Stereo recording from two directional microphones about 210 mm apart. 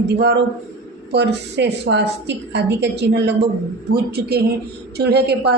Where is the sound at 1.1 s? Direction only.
55° right (ahead or behind).